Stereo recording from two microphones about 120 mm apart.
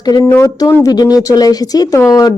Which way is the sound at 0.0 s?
35° left (ahead or behind).